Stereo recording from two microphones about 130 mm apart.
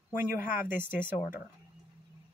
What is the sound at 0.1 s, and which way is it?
Speech, 15° right (ahead or behind).